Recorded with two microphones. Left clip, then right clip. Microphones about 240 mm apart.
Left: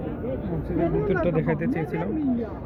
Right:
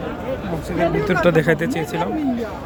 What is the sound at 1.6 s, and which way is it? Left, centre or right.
Speech, centre.